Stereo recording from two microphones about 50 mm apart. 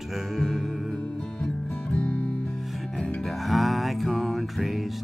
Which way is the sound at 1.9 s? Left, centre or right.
Left.